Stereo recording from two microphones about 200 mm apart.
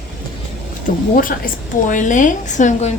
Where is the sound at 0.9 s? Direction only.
45° left (ahead or behind).